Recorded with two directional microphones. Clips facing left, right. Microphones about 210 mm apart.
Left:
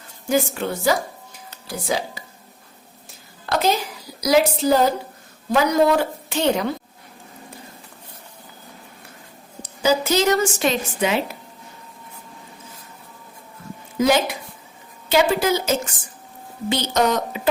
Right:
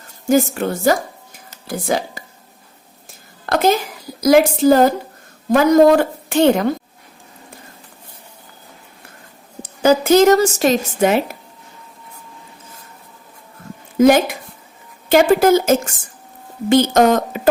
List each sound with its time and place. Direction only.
0.3 s a woman's voice: 45° right (ahead or behind)
3.4 s a woman's voice: 50° right (ahead or behind)
9.6 s a woman's voice: 55° right (ahead or behind)
14.0 s a woman's voice: 50° right (ahead or behind)